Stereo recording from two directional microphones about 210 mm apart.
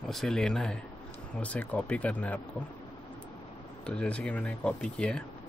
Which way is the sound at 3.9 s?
5° left (ahead or behind).